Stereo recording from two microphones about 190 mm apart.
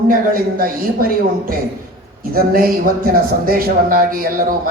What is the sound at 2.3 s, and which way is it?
Speech, 50° right (ahead or behind).